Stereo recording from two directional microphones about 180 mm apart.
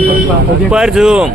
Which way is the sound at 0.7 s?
5° right (ahead or behind).